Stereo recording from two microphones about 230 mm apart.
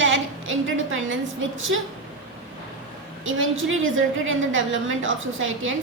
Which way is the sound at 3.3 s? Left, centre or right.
Right.